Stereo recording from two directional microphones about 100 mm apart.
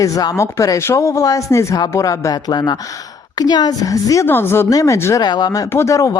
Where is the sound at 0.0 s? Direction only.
35° left (ahead or behind).